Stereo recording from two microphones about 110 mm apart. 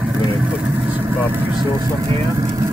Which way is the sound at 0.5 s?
20° right (ahead or behind).